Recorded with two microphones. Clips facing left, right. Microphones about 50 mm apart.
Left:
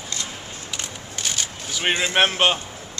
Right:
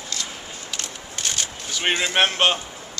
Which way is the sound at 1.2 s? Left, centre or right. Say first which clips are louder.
Even; centre.